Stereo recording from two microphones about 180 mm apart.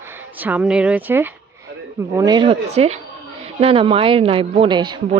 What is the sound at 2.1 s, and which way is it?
A woman's voice, 20° right (ahead or behind).